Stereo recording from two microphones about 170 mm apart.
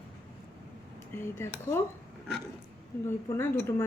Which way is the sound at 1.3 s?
15° left (ahead or behind).